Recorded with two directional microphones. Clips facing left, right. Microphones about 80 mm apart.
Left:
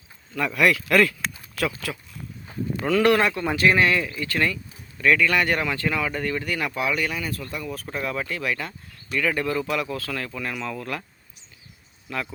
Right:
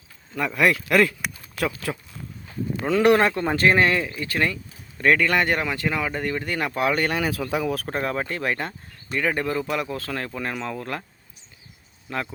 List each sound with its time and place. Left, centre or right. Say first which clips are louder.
0.3 s speech: even; right
2.5 s livestock: even; left
2.8 s speech: right 2 dB; right
3.2 s speech: right 1 dB; right
4.9 s speech: right 1 dB; right
5.3 s speech: right 1 dB; right
6.5 s speech: right 5 dB; right
7.2 s speech: right 7 dB; right
7.9 s speech: right 2 dB; right
12.0 s speech: right 1 dB; right